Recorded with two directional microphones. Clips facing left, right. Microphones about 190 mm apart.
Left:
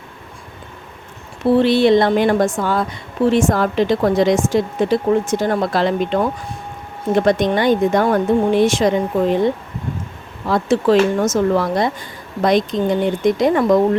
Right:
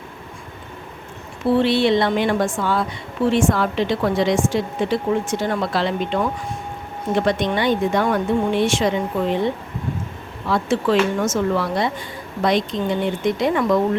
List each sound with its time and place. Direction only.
1.5 s speech: 40° left (ahead or behind)
10.4 s speech: 40° left (ahead or behind)